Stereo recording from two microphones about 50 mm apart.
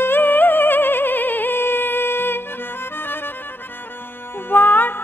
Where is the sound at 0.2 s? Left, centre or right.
Left.